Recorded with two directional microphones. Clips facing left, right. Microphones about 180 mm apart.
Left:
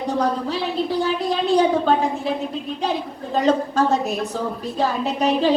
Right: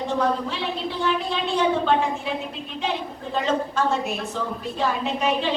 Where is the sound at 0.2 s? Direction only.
40° left (ahead or behind).